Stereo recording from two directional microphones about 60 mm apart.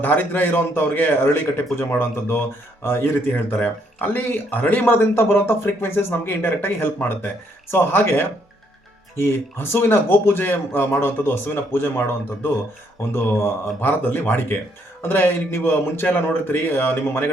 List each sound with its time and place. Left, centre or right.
0.0 s a man's voice: left